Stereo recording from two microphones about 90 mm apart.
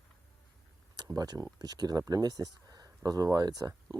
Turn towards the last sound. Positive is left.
turn(degrees=-45)  # may be behind; listen again after turning